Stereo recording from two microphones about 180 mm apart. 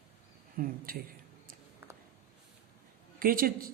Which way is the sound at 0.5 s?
50° right (ahead or behind).